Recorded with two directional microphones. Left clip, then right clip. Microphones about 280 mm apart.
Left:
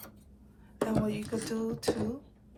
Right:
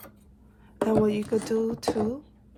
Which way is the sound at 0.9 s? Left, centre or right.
Right.